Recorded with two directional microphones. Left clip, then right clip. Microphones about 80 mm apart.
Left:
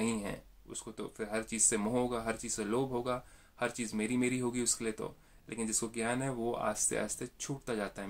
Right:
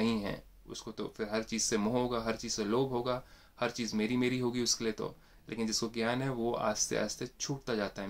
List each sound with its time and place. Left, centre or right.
0.2 s speech: centre
2.7 s speech: centre